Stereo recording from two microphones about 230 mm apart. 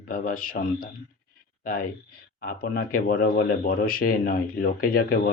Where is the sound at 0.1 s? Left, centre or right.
Left.